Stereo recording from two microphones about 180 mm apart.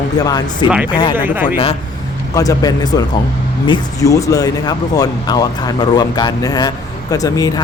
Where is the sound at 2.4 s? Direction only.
20° left (ahead or behind).